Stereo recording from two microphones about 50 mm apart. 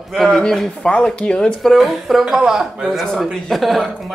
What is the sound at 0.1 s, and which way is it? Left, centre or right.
Speech, centre.